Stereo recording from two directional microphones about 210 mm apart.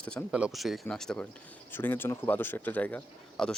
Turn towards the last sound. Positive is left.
turn(degrees=5)  # may be behind; listen again after turning